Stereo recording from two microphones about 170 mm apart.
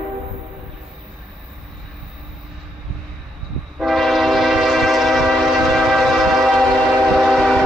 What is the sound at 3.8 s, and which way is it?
Train, centre (ahead or behind).